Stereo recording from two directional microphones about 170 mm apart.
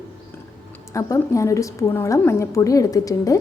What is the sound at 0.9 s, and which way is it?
A woman's voice, 20° left (ahead or behind).